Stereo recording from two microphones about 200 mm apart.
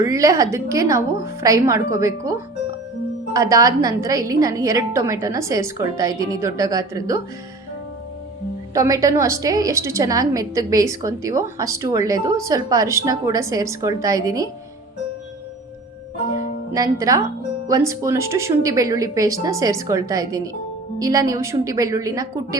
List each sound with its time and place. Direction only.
0.0 s a woman's voice: 15° right (ahead or behind)
8.7 s a woman's voice: 15° right (ahead or behind)
16.7 s a woman's voice: 15° right (ahead or behind)